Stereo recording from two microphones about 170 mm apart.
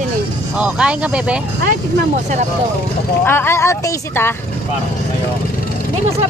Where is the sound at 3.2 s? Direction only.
15° left (ahead or behind).